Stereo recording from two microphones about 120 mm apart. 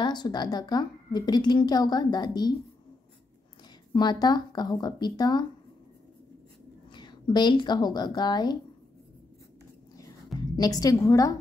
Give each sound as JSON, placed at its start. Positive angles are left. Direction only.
{"t": 0.0, "sound": "speech", "side_deg": 35}
{"t": 3.9, "sound": "speech", "side_deg": 35}
{"t": 6.9, "sound": "a woman's voice", "side_deg": 40}
{"t": 9.9, "sound": "a sound", "side_deg": 30}